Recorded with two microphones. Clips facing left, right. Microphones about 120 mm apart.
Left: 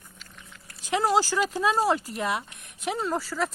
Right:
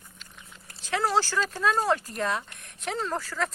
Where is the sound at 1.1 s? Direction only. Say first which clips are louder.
Left 3 dB; 15° left (ahead or behind).